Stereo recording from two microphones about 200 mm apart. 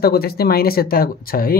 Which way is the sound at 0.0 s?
50° left (ahead or behind).